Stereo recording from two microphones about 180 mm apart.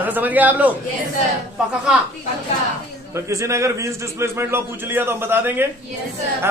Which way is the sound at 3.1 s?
15° right (ahead or behind).